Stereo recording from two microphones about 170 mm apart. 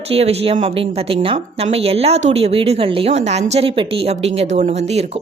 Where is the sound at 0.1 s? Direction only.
35° right (ahead or behind).